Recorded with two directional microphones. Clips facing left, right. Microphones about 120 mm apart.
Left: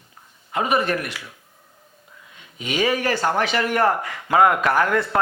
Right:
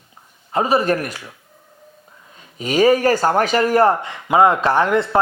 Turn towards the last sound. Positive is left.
turn(degrees=-25)  # may be behind; listen again after turning